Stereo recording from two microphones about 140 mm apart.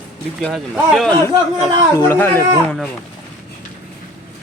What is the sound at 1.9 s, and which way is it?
Speech, 20° left (ahead or behind).